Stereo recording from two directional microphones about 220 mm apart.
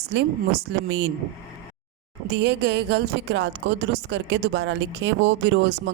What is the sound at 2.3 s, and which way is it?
A woman's voice, 50° right (ahead or behind).